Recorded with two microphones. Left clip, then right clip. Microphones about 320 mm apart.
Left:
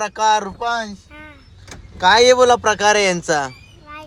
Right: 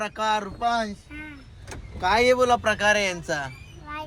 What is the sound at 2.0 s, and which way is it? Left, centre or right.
A man's voice, left.